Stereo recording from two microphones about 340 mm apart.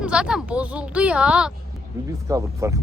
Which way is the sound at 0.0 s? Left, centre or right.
Centre.